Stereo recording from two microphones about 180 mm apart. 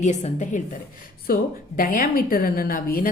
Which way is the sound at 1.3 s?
55° left (ahead or behind).